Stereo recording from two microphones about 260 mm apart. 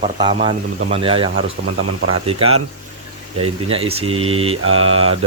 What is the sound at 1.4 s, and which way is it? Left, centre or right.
Speech, right.